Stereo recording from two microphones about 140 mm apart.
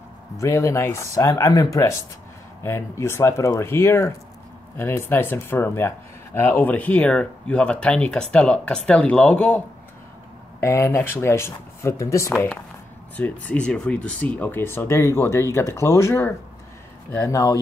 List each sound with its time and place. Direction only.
0.4 s speech: 20° left (ahead or behind)
10.6 s speech: 20° left (ahead or behind)
12.3 s speech: 5° left (ahead or behind); by 17.6 s 25° left (ahead or behind)